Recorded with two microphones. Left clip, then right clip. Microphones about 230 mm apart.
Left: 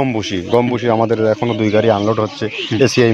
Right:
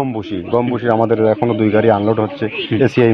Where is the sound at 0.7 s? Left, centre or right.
Left.